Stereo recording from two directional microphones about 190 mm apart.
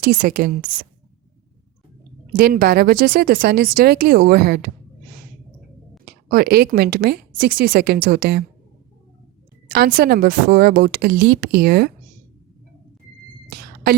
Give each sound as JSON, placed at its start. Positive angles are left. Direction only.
{"t": 0.0, "sound": "speech", "side_deg": -45}
{"t": 2.3, "sound": "speech", "side_deg": -50}
{"t": 6.1, "sound": "speech", "side_deg": -50}
{"t": 9.7, "sound": "speech", "side_deg": -55}